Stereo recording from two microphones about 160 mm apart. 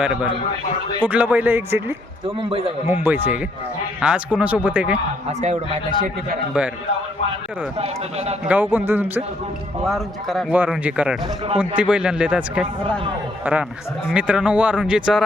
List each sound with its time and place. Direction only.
0.0 s speech: 5° right (ahead or behind)
5.4 s speech: 55° right (ahead or behind)
7.8 s speech: 40° right (ahead or behind)
8.4 s speech: 10° right (ahead or behind)
9.8 s speech: centre (ahead or behind)